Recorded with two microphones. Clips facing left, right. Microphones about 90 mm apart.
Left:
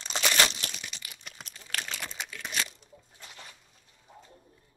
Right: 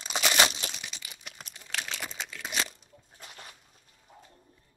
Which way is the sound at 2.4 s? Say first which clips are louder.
Right 1 dB; 15° right (ahead or behind).